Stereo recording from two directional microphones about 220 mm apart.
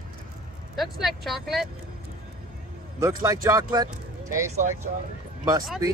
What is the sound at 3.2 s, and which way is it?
Speech, 15° right (ahead or behind).